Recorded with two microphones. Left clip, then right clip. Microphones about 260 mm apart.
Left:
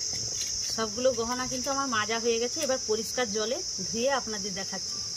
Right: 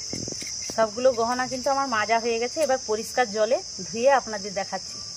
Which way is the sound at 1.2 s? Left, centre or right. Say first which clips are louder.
Right 6 dB; centre.